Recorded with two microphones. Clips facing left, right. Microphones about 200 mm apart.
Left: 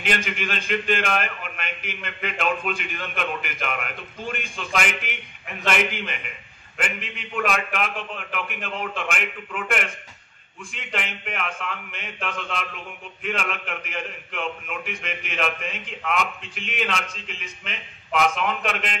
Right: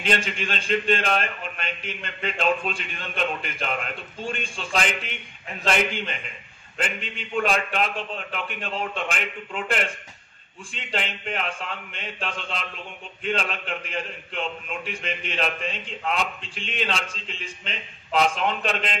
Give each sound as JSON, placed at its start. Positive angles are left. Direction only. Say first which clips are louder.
{"t": 0.0, "sound": "a man's voice", "louder": "right 1 dB", "side_deg": -30}